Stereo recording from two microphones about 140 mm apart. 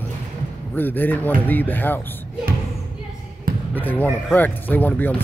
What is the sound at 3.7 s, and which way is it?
Speech, 15° left (ahead or behind).